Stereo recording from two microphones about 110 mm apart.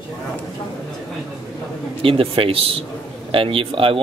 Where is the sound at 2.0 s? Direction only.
55° right (ahead or behind).